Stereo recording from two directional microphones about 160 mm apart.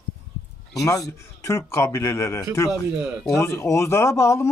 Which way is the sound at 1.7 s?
15° left (ahead or behind).